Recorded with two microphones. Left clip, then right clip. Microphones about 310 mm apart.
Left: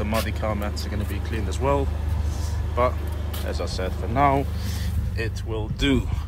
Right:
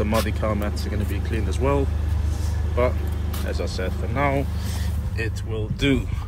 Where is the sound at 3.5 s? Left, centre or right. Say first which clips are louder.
Right 1 dB; centre.